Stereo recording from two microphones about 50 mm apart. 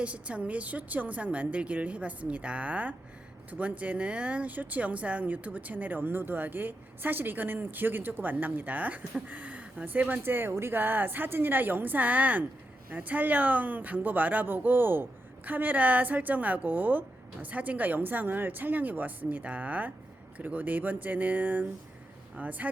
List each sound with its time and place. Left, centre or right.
0.0 s a woman's voice: right
15.4 s speech: right